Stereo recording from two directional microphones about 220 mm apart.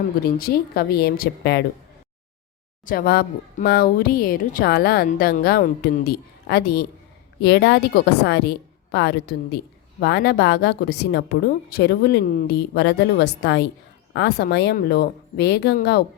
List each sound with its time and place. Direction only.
0.3 s speech: 45° left (ahead or behind)
2.8 s speech: 40° left (ahead or behind)